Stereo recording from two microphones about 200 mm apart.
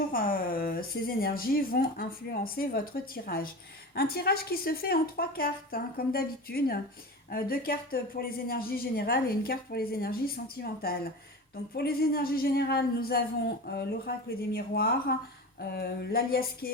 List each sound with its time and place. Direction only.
0.1 s a woman's voice: 45° left (ahead or behind)